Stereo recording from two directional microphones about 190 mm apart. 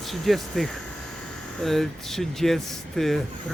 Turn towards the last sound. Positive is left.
turn(degrees=0)  # may be behind; listen again after turning